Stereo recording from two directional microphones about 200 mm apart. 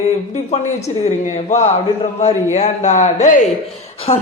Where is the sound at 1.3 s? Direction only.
35° left (ahead or behind).